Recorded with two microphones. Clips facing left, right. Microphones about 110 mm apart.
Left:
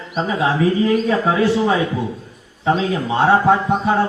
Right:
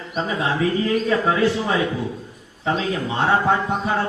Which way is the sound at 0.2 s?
30° left (ahead or behind).